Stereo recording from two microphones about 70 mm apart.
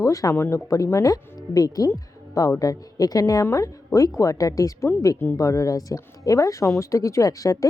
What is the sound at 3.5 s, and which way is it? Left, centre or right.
A woman's voice, left.